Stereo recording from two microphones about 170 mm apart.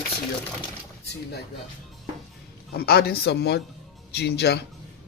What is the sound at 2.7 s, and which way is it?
Speech, 65° left (ahead or behind).